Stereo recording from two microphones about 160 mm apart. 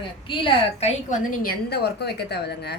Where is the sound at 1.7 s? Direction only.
90° left.